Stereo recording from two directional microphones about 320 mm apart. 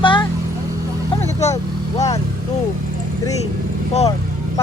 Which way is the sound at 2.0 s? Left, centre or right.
Centre.